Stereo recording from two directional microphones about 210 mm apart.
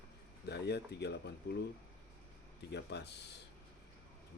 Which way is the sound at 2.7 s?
55° left (ahead or behind).